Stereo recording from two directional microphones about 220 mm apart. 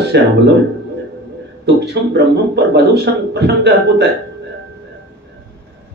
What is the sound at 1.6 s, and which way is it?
A man's voice, 50° right (ahead or behind).